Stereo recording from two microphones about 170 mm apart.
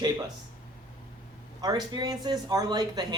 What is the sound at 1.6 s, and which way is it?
Speech, 20° right (ahead or behind).